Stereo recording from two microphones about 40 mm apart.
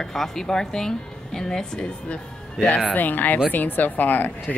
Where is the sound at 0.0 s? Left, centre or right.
Centre.